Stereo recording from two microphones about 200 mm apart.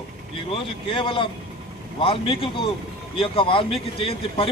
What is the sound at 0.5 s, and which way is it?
Speech, 25° left (ahead or behind).